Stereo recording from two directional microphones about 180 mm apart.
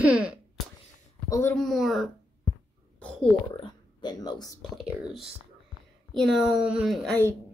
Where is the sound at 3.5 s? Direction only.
25° left (ahead or behind).